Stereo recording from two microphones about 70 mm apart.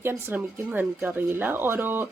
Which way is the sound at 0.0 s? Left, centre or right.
Right.